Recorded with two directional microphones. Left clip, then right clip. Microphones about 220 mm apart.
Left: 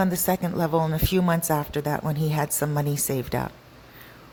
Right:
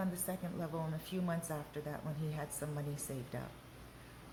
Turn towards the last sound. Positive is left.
turn(degrees=45)  # may be behind; listen again after turning